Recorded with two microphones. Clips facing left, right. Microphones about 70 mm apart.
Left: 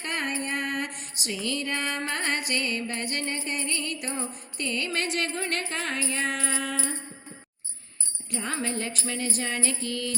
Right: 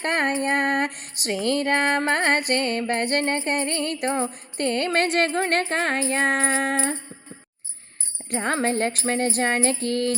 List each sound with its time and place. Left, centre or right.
0.0 s music: right
8.3 s music: right